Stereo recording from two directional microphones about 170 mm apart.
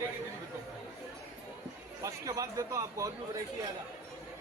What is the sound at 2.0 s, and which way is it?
A man's voice, 20° right (ahead or behind).